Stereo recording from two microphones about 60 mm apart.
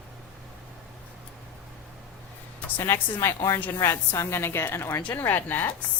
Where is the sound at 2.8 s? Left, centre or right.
Left.